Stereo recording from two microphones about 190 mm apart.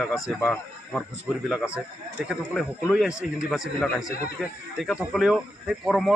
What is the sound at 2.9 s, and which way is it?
A man's voice, 5° right (ahead or behind).